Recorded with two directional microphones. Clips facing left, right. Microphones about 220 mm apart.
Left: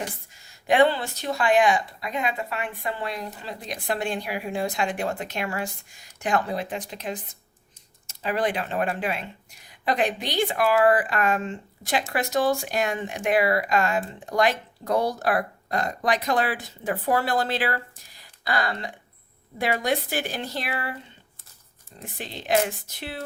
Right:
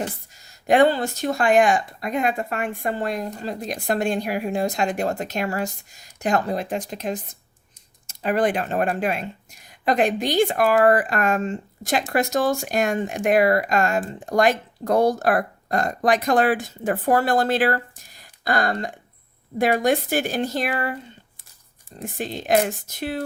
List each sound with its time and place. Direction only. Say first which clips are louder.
0.4 s speech: right 3 dB; 45° right (ahead or behind)
22.0 s speech: right 6 dB; 45° right (ahead or behind)